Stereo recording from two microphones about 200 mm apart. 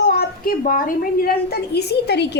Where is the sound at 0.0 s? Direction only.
50° left (ahead or behind).